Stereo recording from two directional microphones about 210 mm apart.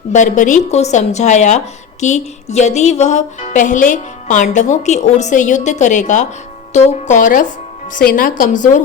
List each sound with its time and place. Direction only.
0.1 s speech: 35° left (ahead or behind)